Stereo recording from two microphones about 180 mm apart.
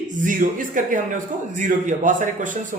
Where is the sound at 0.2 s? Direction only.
50° right (ahead or behind).